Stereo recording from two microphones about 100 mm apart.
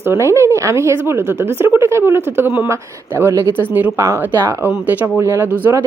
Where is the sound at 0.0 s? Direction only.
25° right (ahead or behind).